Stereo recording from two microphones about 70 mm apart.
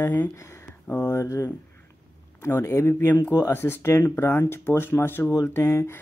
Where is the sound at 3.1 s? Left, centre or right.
Left.